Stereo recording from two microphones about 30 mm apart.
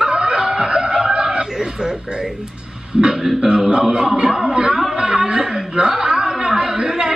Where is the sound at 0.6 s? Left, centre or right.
Right.